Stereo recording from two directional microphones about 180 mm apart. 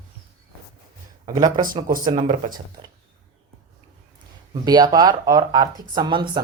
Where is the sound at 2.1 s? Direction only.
40° right (ahead or behind).